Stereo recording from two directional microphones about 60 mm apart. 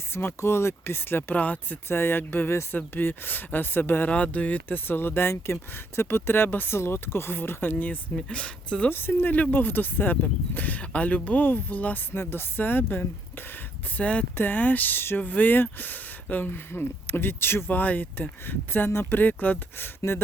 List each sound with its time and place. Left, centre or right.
0.1 s speech: left
1.4 s speech: left
1.9 s speech: left
4.1 s speech: left
4.9 s speech: left
8.1 s speech: centre
8.9 s speech: left
12.1 s speech: left
13.9 s speech: left
14.3 s speech: left
17.7 s speech: left